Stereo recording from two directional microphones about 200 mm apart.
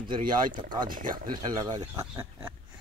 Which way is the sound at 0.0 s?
25° right (ahead or behind).